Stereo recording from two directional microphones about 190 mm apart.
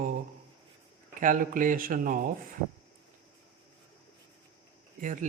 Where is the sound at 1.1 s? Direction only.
45° right (ahead or behind).